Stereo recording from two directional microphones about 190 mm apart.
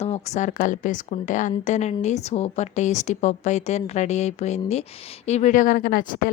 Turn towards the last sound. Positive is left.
turn(degrees=50)  # may be behind; listen again after turning